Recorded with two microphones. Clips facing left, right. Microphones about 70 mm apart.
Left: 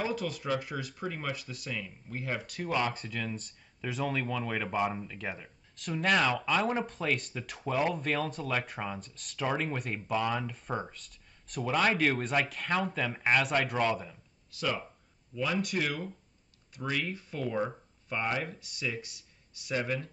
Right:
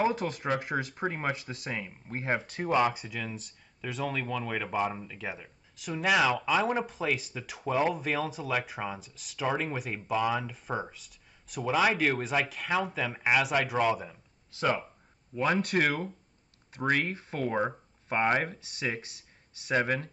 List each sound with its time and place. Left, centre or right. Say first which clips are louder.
0.0 s speech: right 5 dB; right
2.9 s speech: even; centre
14.5 s speech: right 5 dB; right
15.3 s speech: right 4 dB; right